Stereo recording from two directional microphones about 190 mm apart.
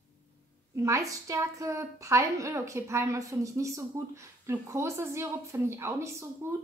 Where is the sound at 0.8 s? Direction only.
15° right (ahead or behind).